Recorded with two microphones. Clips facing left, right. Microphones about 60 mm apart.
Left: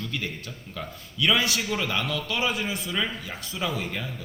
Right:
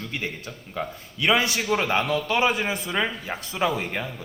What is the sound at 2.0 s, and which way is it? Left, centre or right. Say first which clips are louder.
Speech: right 5 dB; right.